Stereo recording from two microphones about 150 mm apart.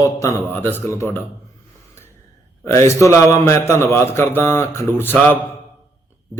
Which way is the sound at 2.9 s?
20° left (ahead or behind).